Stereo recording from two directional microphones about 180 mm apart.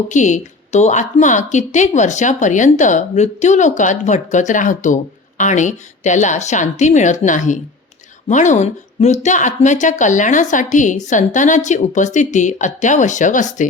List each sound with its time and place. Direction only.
0.1 s speech: 45° left (ahead or behind)